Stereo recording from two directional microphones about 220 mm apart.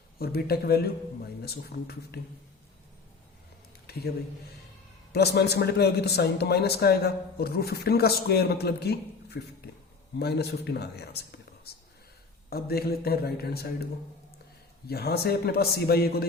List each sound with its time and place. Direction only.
0.2 s a man's voice: 45° left (ahead or behind)
3.9 s a man's voice: 45° left (ahead or behind)
5.1 s a man's voice: 50° left (ahead or behind)
14.8 s a man's voice: 45° left (ahead or behind)